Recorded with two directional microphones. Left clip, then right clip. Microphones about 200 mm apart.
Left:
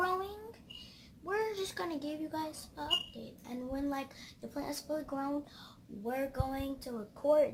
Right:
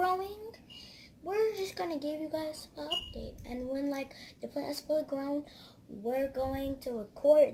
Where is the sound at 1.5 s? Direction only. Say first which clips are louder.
Right 2 dB; 15° left (ahead or behind).